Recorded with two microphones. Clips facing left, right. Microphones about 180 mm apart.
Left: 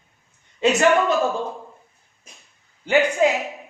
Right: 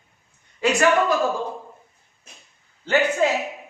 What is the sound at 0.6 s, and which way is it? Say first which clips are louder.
Speech: left 2 dB; 25° left (ahead or behind).